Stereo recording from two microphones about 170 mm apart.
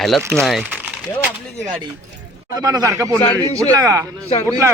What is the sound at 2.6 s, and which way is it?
Speech, 20° right (ahead or behind).